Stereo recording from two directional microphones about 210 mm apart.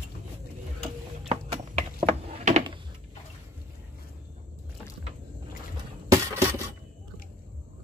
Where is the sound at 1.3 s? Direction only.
30° right (ahead or behind).